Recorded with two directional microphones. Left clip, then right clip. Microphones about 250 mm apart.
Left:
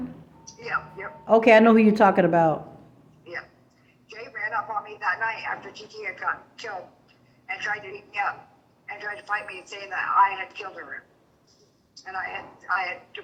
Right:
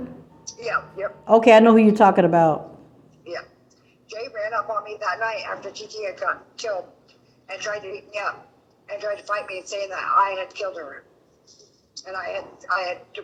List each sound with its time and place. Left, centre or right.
0.6 s a woman's voice: centre
4.1 s a sound: centre
7.5 s a woman's voice: centre
12.0 s a woman's voice: centre